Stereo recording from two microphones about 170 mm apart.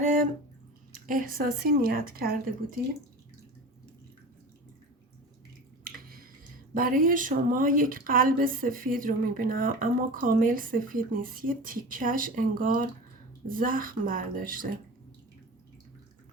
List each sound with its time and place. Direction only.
1.0 s speech: 55° right (ahead or behind)
5.8 s drip: 60° right (ahead or behind)
6.7 s speech: 55° right (ahead or behind)